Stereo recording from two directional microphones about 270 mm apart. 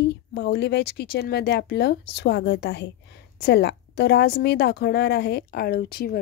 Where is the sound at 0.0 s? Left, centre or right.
Left.